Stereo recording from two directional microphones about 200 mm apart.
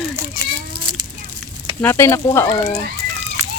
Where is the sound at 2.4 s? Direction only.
30° left (ahead or behind).